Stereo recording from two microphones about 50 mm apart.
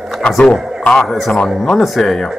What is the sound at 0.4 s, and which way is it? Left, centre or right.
Speech, centre.